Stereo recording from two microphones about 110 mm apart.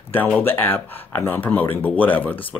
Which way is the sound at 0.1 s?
15° left (ahead or behind).